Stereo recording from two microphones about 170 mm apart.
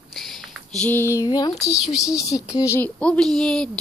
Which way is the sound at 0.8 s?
10° left (ahead or behind).